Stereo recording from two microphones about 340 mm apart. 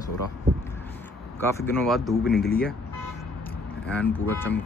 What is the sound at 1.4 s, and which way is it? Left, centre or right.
Speech, centre.